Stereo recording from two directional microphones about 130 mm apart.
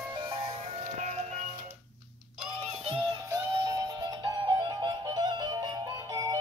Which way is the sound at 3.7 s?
30° right (ahead or behind).